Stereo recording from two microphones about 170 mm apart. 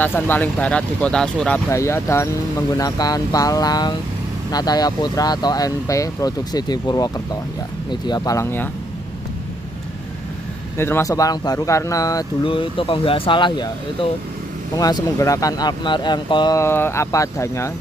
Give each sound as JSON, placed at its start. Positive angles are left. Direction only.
{"t": 0.0, "sound": "speech", "side_deg": 10}
{"t": 1.7, "sound": "speech", "side_deg": 15}
{"t": 10.8, "sound": "speech", "side_deg": 15}